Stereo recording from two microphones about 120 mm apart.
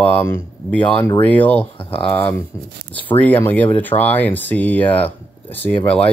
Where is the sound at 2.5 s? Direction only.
25° left (ahead or behind).